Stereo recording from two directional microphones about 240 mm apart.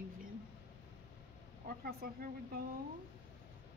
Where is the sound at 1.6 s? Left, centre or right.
Right.